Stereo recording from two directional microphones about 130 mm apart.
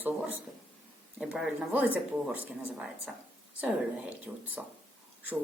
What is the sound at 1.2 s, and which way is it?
A woman's voice, 5° right (ahead or behind).